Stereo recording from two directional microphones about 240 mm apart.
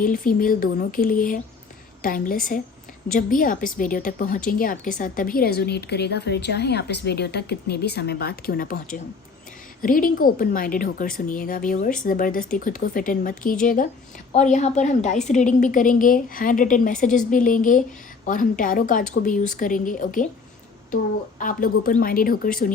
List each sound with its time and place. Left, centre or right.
0.0 s a woman's voice: left